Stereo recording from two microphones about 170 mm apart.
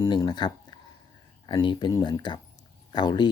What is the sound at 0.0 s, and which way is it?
Speech, 20° left (ahead or behind).